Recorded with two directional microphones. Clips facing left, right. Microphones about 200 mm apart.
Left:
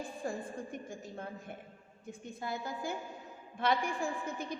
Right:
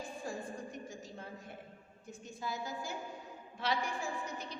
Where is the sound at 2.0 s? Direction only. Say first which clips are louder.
Left 2 dB; 55° left (ahead or behind).